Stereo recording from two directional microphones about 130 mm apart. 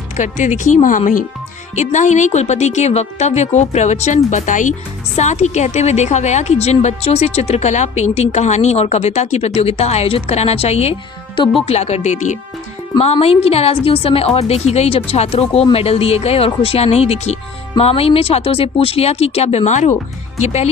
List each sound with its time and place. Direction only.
0.2 s speech: 70° left (ahead or behind); by 1.2 s 85° left
1.8 s speech: 65° left (ahead or behind)
11.3 s speech: 40° left (ahead or behind); by 12.4 s 65° left (ahead or behind)
13.0 s a woman's voice: 50° left (ahead or behind); by 20.0 s 65° left (ahead or behind)
20.4 s speech: 55° left (ahead or behind)